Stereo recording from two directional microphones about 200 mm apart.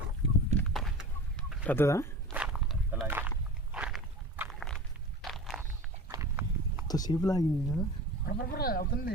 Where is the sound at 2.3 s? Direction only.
5° right (ahead or behind).